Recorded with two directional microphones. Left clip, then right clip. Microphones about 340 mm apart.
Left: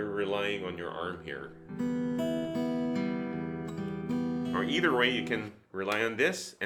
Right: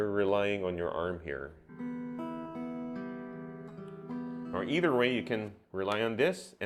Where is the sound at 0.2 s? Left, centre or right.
Right.